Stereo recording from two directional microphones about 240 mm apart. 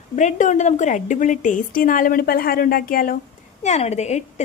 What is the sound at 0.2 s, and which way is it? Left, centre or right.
A woman's voice, left.